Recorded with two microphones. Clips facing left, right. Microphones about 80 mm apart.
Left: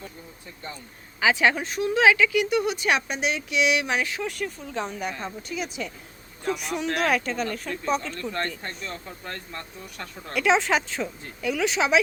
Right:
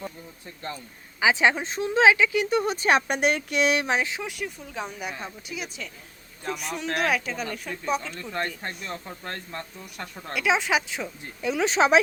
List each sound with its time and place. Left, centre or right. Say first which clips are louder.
1.2 s speech: even; right
3.1 s speech: right 3 dB; right; by 9.0 s centre
9.2 s speech: right 1 dB; right
10.3 s speech: left 2 dB; centre
11.4 s speech: right 2 dB; right